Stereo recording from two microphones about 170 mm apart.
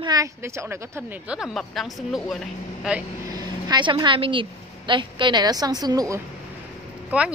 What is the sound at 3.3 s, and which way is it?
A woman's voice, 25° right (ahead or behind).